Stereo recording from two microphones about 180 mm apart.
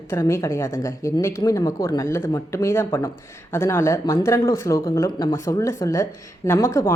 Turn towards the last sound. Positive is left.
turn(degrees=15)  # may be behind; listen again after turning